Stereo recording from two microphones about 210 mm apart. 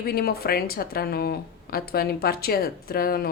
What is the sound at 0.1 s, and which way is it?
A woman's voice, 45° left (ahead or behind).